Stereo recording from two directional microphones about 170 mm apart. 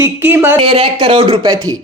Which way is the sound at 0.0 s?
10° right (ahead or behind).